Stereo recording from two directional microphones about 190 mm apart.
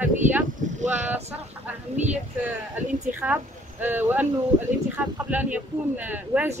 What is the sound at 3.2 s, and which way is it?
Speech, 10° right (ahead or behind).